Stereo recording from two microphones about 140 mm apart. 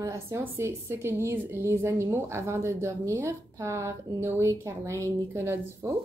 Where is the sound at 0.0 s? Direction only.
20° right (ahead or behind).